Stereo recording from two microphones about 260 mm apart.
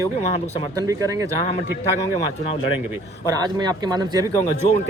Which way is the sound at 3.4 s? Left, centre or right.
Centre.